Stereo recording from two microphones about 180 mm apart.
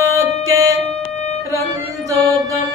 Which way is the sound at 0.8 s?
35° left (ahead or behind).